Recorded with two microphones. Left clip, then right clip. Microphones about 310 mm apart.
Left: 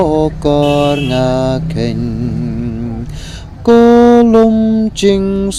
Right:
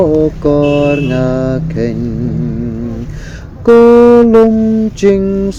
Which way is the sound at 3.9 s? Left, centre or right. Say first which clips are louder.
Right 2 dB; left.